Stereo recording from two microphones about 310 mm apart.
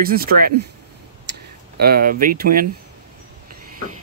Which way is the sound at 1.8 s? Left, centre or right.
Right.